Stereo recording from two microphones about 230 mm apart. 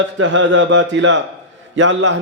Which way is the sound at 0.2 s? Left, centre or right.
Right.